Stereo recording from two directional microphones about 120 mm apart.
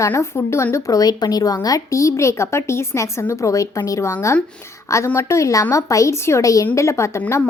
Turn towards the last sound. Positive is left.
turn(degrees=25)  # may be behind; listen again after turning